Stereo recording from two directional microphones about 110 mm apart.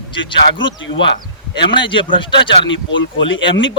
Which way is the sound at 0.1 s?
50° left (ahead or behind).